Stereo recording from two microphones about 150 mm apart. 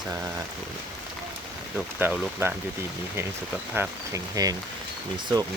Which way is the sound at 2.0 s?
15° right (ahead or behind).